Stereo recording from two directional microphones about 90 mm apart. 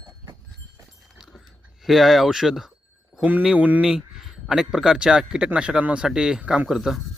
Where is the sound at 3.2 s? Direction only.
20° right (ahead or behind).